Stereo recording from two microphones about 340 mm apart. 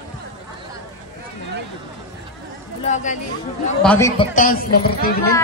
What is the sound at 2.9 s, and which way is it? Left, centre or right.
Speech, left.